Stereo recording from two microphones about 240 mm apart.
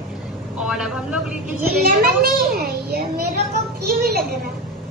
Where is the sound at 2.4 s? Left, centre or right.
Right.